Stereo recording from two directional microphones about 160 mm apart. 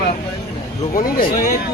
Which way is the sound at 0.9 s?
60° left (ahead or behind).